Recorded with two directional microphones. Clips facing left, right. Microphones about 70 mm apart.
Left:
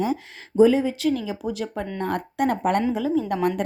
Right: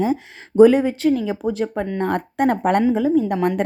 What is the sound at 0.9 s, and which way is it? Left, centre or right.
Speech, right.